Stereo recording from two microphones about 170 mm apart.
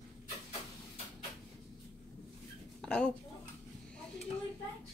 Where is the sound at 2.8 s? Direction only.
5° left (ahead or behind).